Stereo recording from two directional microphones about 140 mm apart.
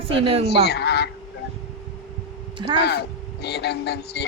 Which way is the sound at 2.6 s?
30° right (ahead or behind).